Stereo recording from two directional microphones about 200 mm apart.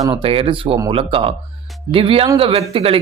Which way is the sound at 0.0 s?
25° right (ahead or behind).